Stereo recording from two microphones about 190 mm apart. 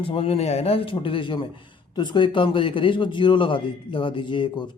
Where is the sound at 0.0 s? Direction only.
30° left (ahead or behind).